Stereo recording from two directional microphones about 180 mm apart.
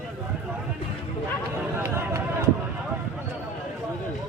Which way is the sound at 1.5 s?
15° right (ahead or behind).